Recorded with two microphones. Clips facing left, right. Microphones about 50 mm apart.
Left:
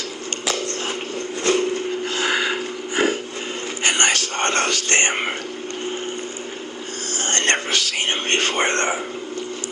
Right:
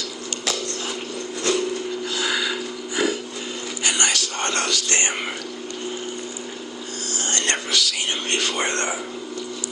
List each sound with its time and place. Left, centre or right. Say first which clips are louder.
0.5 s a sound: left 3 dB; left
3.8 s whispering: left 4 dB; left
7.1 s whispering: left 4 dB; left